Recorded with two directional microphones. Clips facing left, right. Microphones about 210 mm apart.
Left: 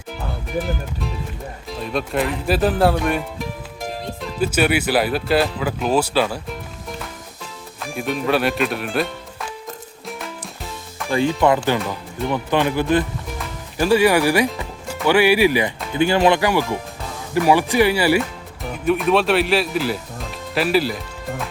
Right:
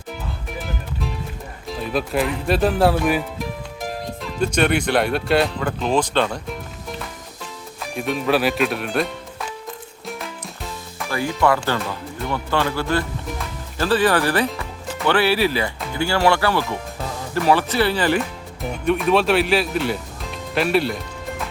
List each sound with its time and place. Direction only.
1.6 s speech: centre (ahead or behind)
7.8 s speech: centre (ahead or behind)
10.1 s music: centre (ahead or behind)
11.1 s speech: 20° left (ahead or behind); by 20.0 s centre (ahead or behind)
20.5 s music: centre (ahead or behind)